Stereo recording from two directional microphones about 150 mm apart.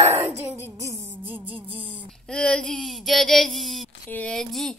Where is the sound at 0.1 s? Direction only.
15° right (ahead or behind).